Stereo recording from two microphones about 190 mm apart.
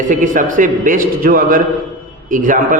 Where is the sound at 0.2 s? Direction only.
45° right (ahead or behind).